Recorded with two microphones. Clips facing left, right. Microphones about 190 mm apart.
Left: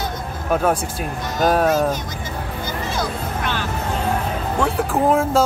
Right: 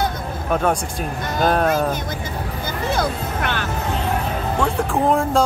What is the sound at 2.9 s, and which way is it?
Music, 55° right (ahead or behind).